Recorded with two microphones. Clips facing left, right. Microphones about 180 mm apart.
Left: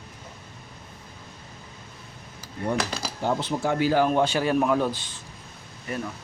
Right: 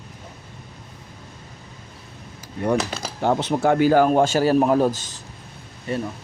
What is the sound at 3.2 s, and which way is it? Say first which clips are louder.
A man's voice: right 6 dB; 65° right (ahead or behind).